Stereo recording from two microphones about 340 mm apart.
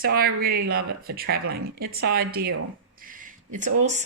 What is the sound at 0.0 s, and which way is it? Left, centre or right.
Speech, right.